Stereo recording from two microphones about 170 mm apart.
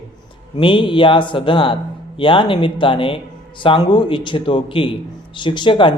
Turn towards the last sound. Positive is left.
turn(degrees=30)  # may be behind; listen again after turning